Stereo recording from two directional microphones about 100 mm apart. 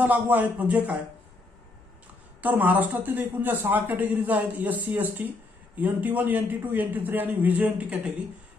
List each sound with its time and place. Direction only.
0.0 s a man's voice: 15° right (ahead or behind)
2.4 s a man's voice: 20° right (ahead or behind)